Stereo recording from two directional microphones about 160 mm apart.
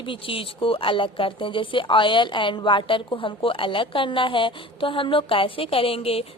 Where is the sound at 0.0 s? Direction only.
35° left (ahead or behind).